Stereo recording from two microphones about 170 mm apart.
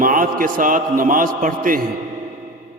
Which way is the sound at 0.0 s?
55° right (ahead or behind).